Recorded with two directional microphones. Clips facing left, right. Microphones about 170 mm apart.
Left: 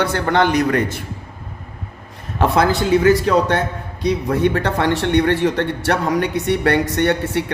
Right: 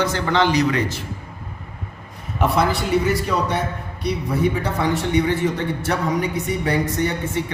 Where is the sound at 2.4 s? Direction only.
90° left.